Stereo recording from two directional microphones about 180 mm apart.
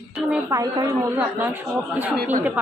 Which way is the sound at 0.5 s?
20° right (ahead or behind).